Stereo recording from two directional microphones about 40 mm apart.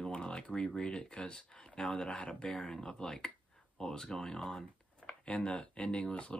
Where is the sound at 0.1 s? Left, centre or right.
Left.